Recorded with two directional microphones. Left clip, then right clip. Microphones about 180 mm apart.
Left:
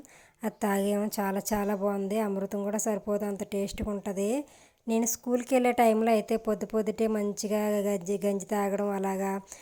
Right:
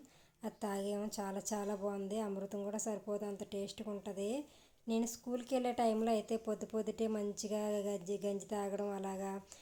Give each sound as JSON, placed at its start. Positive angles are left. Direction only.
{"t": 0.4, "sound": "speech", "side_deg": 40}